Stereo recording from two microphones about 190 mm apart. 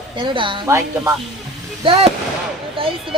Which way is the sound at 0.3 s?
25° right (ahead or behind).